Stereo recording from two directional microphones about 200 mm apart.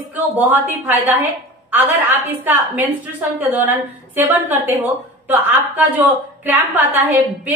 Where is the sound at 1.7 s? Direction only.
10° right (ahead or behind).